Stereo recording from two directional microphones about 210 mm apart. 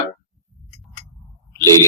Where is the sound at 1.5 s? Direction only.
15° left (ahead or behind).